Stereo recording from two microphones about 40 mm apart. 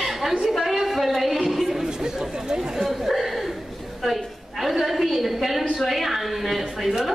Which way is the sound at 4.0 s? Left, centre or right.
Centre.